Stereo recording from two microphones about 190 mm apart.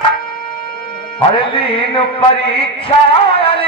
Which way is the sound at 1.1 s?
25° left (ahead or behind).